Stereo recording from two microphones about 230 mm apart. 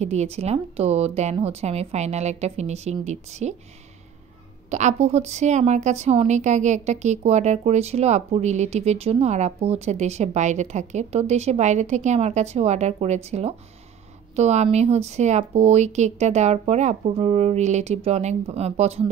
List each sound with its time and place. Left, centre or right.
0.0 s a woman's voice: right
4.6 s a woman's voice: right